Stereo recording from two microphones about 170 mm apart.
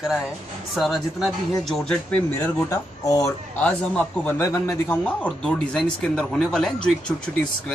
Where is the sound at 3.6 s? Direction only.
10° left (ahead or behind).